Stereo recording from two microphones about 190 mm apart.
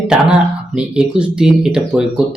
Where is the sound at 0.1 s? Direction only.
5° right (ahead or behind).